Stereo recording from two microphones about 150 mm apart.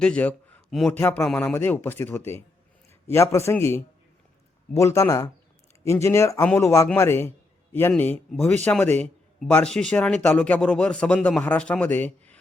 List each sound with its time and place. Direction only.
0.0 s a man's voice: 10° left (ahead or behind)